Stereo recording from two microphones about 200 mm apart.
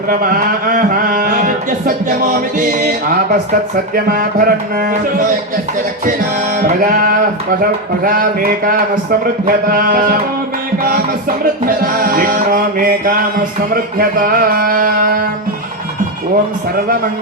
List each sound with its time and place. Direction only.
0.1 s a sound: 45° right (ahead or behind)
2.6 s music: 45° right (ahead or behind)
6.6 s music: 45° right (ahead or behind)
11.6 s music: 45° right (ahead or behind)